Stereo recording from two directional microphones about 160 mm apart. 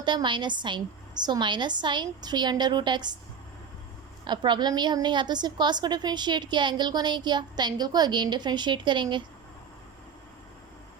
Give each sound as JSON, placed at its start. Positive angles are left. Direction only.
{"t": 0.0, "sound": "a woman's voice", "side_deg": -30}
{"t": 4.3, "sound": "a woman's voice", "side_deg": -30}